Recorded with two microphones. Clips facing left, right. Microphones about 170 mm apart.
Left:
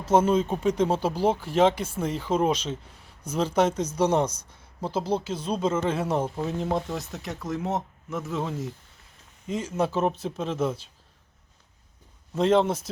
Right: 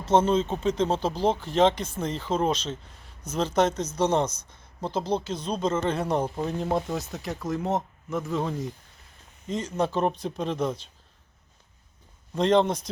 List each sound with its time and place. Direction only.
0.0 s speech: 10° left (ahead or behind)
12.3 s speech: 5° left (ahead or behind)